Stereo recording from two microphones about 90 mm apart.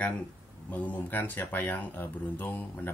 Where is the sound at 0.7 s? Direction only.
15° left (ahead or behind).